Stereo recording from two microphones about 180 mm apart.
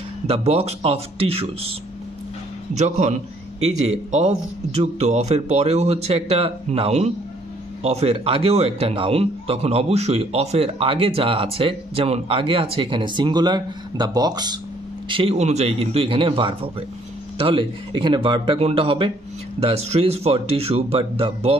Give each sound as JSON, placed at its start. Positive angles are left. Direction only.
{"t": 0.3, "sound": "a man's voice", "side_deg": -35}
{"t": 2.8, "sound": "a man's voice", "side_deg": -40}